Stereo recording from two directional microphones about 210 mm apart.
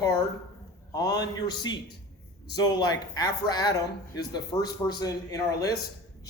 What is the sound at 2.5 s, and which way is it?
Speech, 20° left (ahead or behind).